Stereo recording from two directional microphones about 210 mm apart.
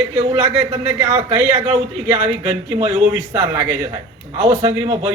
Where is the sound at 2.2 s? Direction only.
30° right (ahead or behind).